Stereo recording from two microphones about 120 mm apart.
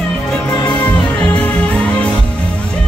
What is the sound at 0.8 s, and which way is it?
Music, 10° left (ahead or behind).